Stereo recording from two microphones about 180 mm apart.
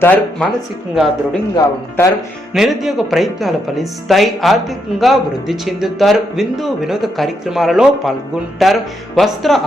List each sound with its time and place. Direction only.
0.0 s speech: 10° left (ahead or behind)
1.5 s speech: 20° left (ahead or behind)
2.5 s speech: centre (ahead or behind)